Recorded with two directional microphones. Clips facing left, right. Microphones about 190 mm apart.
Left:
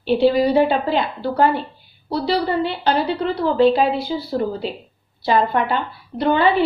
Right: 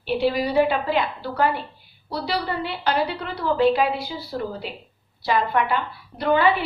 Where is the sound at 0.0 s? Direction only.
30° left (ahead or behind).